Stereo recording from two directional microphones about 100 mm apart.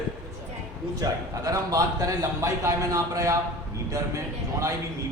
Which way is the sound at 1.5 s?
35° right (ahead or behind).